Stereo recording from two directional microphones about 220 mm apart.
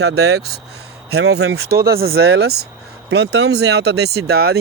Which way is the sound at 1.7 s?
45° right (ahead or behind).